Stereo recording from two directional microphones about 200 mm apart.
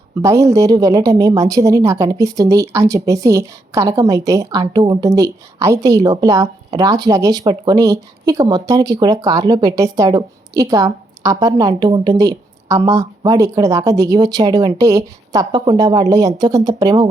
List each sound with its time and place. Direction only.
0.2 s a woman's voice: 15° right (ahead or behind)